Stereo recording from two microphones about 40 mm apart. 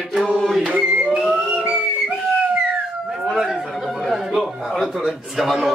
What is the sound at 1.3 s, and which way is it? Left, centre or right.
Whistle, right.